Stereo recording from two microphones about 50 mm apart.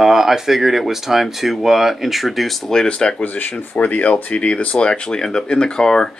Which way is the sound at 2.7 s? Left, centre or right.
Centre.